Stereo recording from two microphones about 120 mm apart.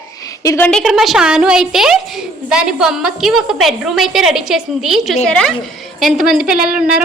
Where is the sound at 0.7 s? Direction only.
Centre (ahead or behind).